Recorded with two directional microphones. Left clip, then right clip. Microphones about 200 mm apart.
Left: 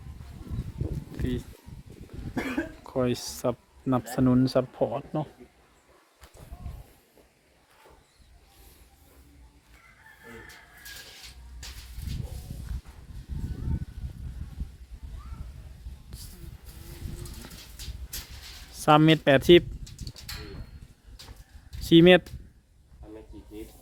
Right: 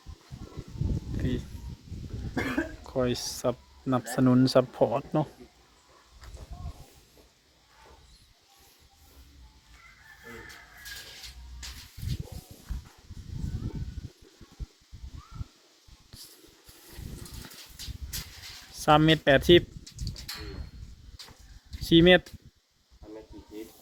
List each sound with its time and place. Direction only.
1.1 s a sound: 15° left (ahead or behind)
2.3 s cough: 10° right (ahead or behind)
2.8 s speech: 10° left (ahead or behind); by 5.2 s 10° right (ahead or behind)
16.1 s a sound: 20° left (ahead or behind)
18.7 s bird: 20° left (ahead or behind)
21.8 s speech: 20° left (ahead or behind)